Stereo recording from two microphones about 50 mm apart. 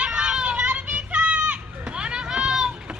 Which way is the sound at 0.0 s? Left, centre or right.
Centre.